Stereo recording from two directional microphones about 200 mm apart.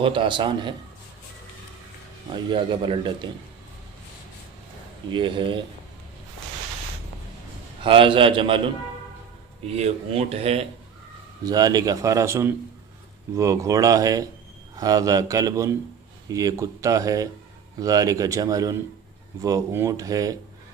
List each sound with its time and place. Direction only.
0.0 s a man's voice: 25° right (ahead or behind)
2.3 s a man's voice: 25° right (ahead or behind)
5.1 s a man's voice: 25° right (ahead or behind)
7.9 s a man's voice: 25° right (ahead or behind)
9.7 s a man's voice: 30° right (ahead or behind)
11.4 s a man's voice: 20° right (ahead or behind)